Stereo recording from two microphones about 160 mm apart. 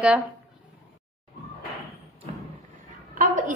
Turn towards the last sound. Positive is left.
turn(degrees=-55)  # may be behind; listen again after turning